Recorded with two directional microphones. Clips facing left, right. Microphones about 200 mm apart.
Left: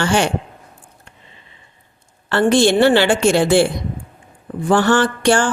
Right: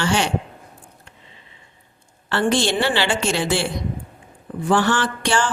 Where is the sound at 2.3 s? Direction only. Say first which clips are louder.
Left 6 dB; 50° left (ahead or behind).